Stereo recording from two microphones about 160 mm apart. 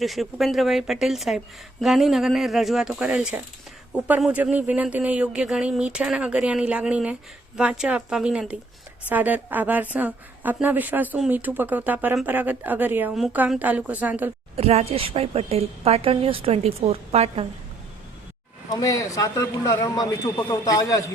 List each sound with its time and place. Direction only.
0.0 s speech: centre (ahead or behind)
14.5 s speech: 40° right (ahead or behind)
18.7 s a man's voice: 20° left (ahead or behind)